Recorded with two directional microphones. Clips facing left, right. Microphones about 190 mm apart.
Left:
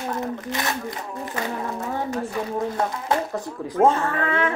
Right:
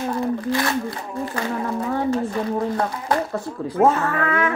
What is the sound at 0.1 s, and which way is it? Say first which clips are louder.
Speech: right 6 dB; 20° left (ahead or behind).